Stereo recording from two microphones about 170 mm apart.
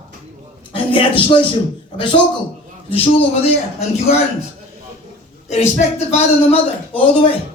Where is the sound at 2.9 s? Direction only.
35° left (ahead or behind).